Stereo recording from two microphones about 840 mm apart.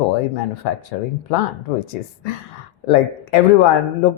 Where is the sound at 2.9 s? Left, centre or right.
Left.